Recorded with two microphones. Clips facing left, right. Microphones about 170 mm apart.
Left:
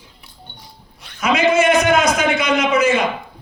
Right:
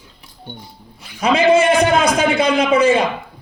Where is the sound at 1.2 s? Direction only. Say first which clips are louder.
Right 2 dB; 30° right (ahead or behind).